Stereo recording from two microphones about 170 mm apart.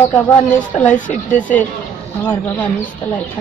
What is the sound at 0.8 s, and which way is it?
Speech, 50° left (ahead or behind).